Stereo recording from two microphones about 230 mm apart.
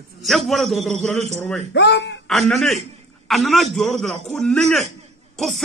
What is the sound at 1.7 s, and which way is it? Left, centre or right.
Speech, left.